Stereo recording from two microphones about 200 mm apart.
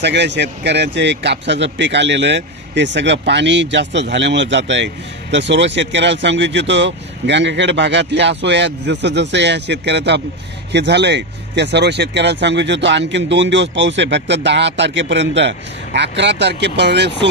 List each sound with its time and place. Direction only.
0.0 s speech: 60° right (ahead or behind)